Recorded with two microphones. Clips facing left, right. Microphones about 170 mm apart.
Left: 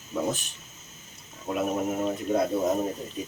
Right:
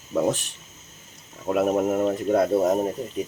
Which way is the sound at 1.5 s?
70° right (ahead or behind).